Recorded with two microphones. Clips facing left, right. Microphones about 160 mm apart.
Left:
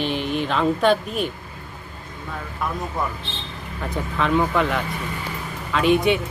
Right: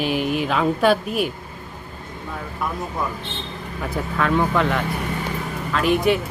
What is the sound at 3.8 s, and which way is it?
Speech, centre (ahead or behind).